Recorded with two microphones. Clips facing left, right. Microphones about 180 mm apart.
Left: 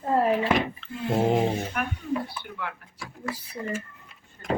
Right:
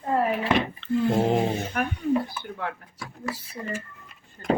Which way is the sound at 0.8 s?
Centre (ahead or behind).